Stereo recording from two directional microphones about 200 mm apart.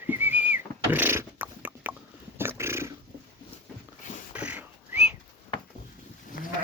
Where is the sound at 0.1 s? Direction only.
10° right (ahead or behind).